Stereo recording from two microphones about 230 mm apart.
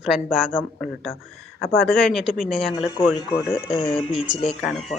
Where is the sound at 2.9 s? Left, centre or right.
Centre.